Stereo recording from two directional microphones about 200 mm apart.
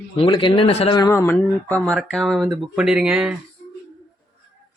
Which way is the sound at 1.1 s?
10° left (ahead or behind).